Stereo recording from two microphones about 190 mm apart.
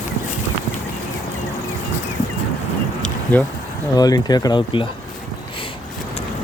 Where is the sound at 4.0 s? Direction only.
20° left (ahead or behind).